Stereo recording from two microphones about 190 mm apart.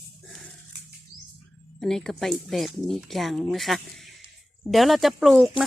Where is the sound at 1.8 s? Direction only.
Centre (ahead or behind).